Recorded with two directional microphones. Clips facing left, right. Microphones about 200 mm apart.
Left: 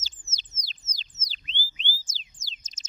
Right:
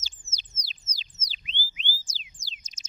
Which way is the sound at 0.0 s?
10° right (ahead or behind).